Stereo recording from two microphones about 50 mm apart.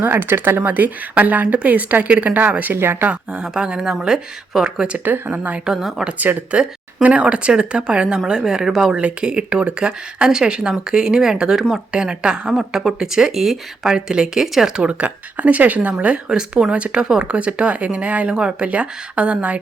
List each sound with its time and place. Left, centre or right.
0.0 s speech: right
0.6 s speech: right
2.7 s speech: right
3.1 s speech: centre
5.0 s speech: right
5.4 s speech: right
5.6 s speech: centre
6.5 s speech: right
8.9 s speech: right; by 14.7 s centre
14.7 s speech: right